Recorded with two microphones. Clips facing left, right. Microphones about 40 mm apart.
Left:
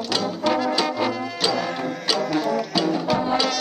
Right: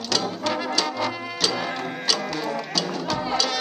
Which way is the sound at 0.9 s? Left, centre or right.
Centre.